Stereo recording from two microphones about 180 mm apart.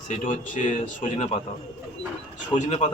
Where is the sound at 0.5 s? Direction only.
45° left (ahead or behind).